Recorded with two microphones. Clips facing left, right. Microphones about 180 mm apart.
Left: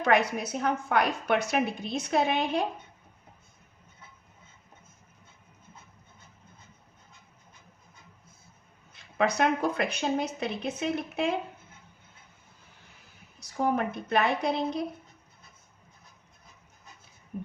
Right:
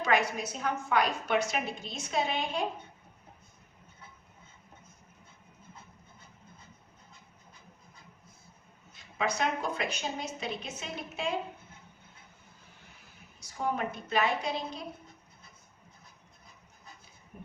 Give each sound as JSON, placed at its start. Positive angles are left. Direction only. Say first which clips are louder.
{"t": 0.0, "sound": "a woman's voice", "louder": "left 4 dB", "side_deg": 60}
{"t": 9.1, "sound": "a woman's voice", "louder": "left 5 dB", "side_deg": 60}
{"t": 13.6, "sound": "a woman's voice", "louder": "left 5 dB", "side_deg": 60}